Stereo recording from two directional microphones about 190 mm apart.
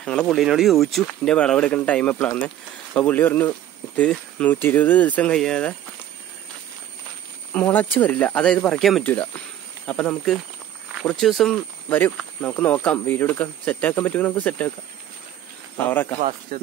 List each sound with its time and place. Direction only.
0.0 s speech: 5° left (ahead or behind)
7.5 s speech: 10° left (ahead or behind)
15.8 s speech: 10° left (ahead or behind)
16.2 s speech: 40° right (ahead or behind)